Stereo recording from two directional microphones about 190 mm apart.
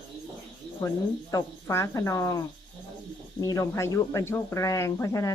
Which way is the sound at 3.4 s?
15° left (ahead or behind).